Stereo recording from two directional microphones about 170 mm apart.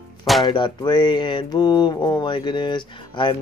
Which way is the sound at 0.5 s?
25° left (ahead or behind).